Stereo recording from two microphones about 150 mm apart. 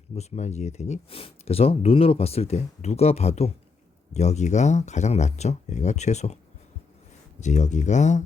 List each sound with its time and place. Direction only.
0.2 s speech: 50° left (ahead or behind)